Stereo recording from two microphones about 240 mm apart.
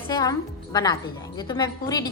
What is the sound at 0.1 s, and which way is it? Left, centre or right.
A woman's voice, centre.